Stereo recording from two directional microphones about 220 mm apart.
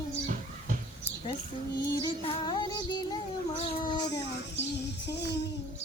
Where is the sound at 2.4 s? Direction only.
20° left (ahead or behind).